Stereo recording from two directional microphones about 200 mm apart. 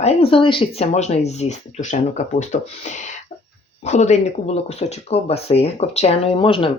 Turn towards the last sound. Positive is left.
turn(degrees=25)  # may be behind; listen again after turning